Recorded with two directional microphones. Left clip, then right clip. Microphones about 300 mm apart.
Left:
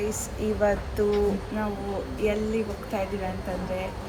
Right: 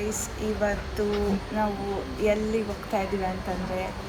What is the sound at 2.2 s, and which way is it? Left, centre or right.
Speech, centre.